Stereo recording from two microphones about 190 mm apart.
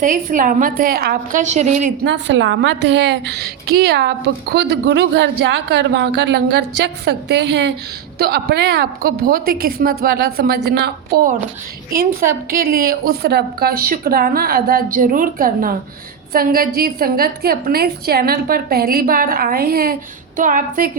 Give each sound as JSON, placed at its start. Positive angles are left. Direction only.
{"t": 0.0, "sound": "a woman's voice", "side_deg": -45}
{"t": 2.0, "sound": "a woman's voice", "side_deg": -70}